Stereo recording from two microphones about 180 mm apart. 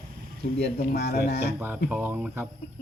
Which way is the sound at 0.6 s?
60° left (ahead or behind).